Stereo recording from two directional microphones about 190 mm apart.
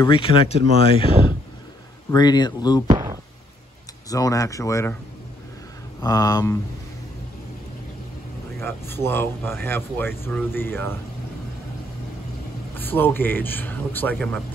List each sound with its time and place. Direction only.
0.0 s speech: 25° left (ahead or behind)
2.9 s a sound: 20° right (ahead or behind)
4.1 s speech: 20° left (ahead or behind)
5.9 s speech: 20° left (ahead or behind)
8.5 s speech: 10° left (ahead or behind)
12.7 s speech: 10° left (ahead or behind)